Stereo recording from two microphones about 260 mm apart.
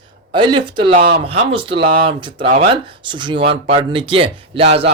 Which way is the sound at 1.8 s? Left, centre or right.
Right.